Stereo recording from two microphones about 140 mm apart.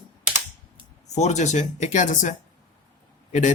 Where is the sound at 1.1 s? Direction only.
55° left (ahead or behind).